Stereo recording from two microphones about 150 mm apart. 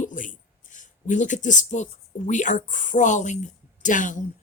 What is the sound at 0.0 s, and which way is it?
Speech, 60° left (ahead or behind).